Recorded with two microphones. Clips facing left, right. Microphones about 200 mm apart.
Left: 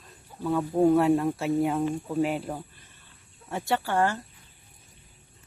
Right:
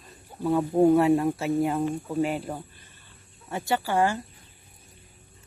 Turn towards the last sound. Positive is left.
turn(degrees=-10)  # may be behind; listen again after turning